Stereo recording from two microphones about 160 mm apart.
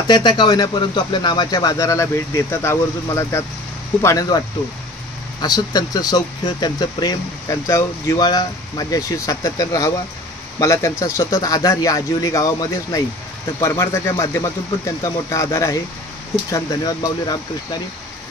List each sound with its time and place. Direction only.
0.1 s speech: 25° left (ahead or behind)
5.4 s speech: 25° left (ahead or behind)